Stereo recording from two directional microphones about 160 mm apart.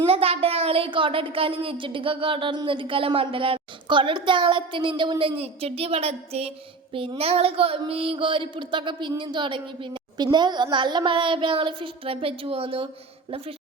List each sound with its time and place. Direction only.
0.0 s a child's voice: 35° right (ahead or behind)